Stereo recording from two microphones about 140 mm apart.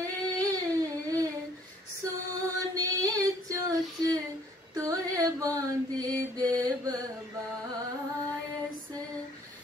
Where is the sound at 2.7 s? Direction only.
25° right (ahead or behind).